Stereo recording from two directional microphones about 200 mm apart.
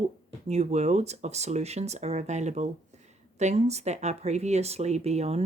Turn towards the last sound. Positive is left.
turn(degrees=-30)  # may be behind; listen again after turning